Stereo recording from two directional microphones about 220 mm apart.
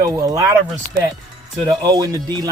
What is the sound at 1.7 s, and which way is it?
Speech, 15° right (ahead or behind).